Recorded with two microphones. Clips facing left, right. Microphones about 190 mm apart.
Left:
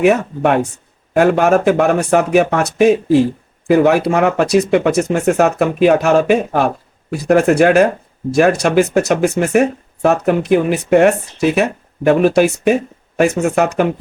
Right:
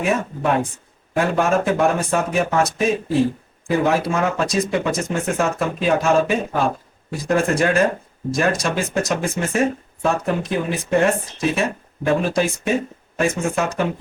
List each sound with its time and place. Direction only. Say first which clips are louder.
0.0 s speech: left 8 dB; 70° left (ahead or behind)